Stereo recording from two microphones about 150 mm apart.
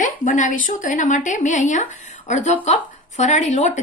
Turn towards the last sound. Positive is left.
turn(degrees=55)  # may be behind; listen again after turning